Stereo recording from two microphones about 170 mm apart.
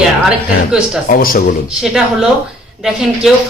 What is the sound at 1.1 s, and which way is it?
Speech, 60° left (ahead or behind).